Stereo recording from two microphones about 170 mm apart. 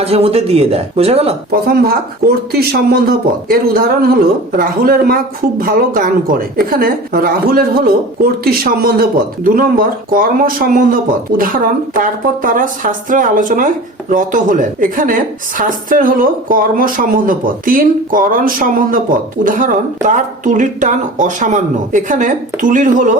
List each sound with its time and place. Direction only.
0.0 s speech: 35° right (ahead or behind)
1.6 s a woman's voice: 65° right (ahead or behind); by 23.1 s 50° right (ahead or behind)